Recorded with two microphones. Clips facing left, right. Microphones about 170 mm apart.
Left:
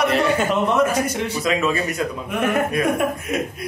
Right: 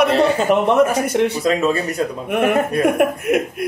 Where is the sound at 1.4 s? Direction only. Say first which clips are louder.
Right 3 dB; 35° right (ahead or behind).